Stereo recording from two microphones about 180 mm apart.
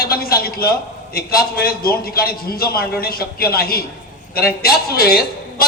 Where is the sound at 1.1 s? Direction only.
55° left (ahead or behind).